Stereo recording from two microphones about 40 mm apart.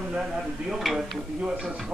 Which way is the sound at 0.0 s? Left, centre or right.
Centre.